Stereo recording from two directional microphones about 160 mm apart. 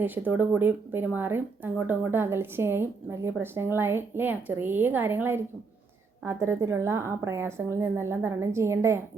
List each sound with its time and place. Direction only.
0.0 s speech: 10° right (ahead or behind)